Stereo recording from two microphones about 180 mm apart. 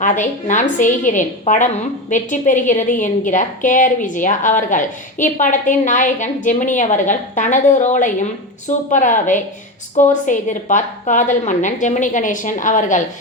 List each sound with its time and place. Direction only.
0.0 s a woman's voice: 45° left (ahead or behind)